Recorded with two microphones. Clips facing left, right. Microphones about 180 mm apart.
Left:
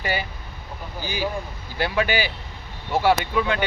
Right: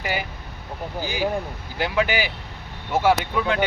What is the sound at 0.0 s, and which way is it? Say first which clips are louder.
Speech: left 1 dB; 15° right (ahead or behind).